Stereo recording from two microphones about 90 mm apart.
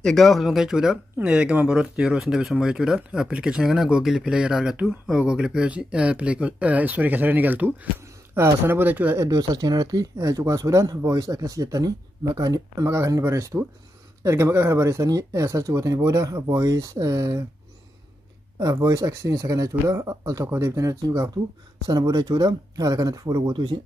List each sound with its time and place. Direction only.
0.0 s speech: centre (ahead or behind); by 9.1 s 20° right (ahead or behind)
9.1 s speech: 35° right (ahead or behind)
9.4 s speech: 50° right (ahead or behind)
18.6 s speech: 40° right (ahead or behind)
21.8 s speech: 45° right (ahead or behind)